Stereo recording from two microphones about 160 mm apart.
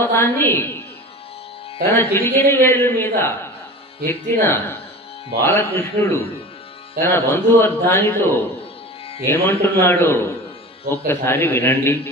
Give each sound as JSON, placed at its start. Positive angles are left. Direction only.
{"t": 0.0, "sound": "a man's voice", "side_deg": 15}
{"t": 1.9, "sound": "a man's voice", "side_deg": 15}